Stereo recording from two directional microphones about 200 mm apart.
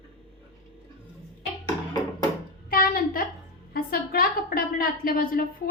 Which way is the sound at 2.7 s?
45° left (ahead or behind).